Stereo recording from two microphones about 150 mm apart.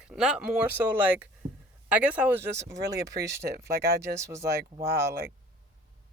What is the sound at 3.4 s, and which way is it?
Speech, 90° right.